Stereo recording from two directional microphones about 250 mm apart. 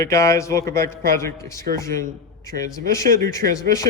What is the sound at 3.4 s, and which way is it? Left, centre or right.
Speech, right.